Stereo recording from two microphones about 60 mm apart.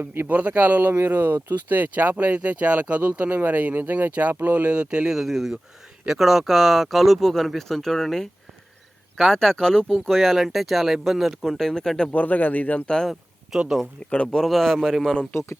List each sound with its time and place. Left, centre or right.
0.0 s speech: right
0.3 s speech: right
5.1 s speech: centre
12.1 s a man's voice: left
13.5 s speech: centre
14.3 s speech: centre